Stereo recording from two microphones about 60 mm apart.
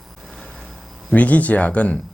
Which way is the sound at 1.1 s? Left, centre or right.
Left.